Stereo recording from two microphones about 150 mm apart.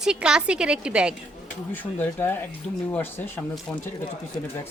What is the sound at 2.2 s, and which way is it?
Speech, 15° left (ahead or behind).